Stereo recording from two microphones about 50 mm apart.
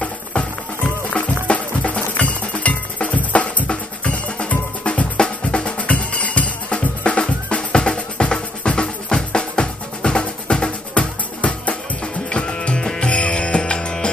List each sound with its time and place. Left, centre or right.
0.0 s music: left